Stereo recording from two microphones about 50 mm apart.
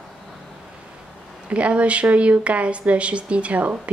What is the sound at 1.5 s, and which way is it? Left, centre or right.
Speech, right.